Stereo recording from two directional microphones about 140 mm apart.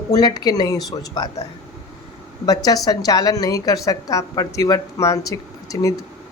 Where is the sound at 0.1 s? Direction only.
30° left (ahead or behind).